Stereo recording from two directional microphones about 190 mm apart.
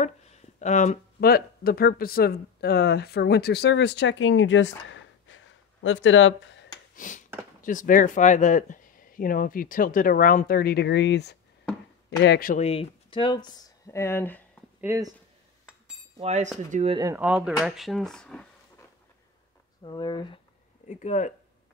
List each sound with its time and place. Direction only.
0.0 s a sound: 35° left (ahead or behind)
1.2 s speech: 55° left (ahead or behind); by 6.7 s 75° left (ahead or behind)
7.0 s speech: 45° left (ahead or behind); by 12.4 s 65° left (ahead or behind)
12.4 s speech: 35° left (ahead or behind); by 14.4 s 10° left (ahead or behind)
14.8 s speech: 10° right (ahead or behind)
16.2 s cutlery: 35° right (ahead or behind)
17.0 s speech: 10° right (ahead or behind); by 18.5 s 5° left (ahead or behind)
19.8 s speech: 20° left (ahead or behind)
21.0 s speech: 40° left (ahead or behind)